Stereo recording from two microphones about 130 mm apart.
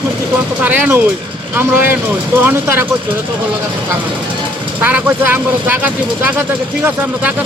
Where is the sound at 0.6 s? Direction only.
10° right (ahead or behind).